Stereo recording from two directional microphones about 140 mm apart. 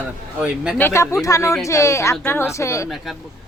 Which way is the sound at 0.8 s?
15° left (ahead or behind).